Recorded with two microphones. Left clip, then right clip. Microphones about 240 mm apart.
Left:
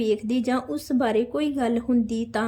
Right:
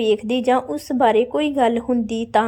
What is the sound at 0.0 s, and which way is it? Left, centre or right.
A woman's voice, centre.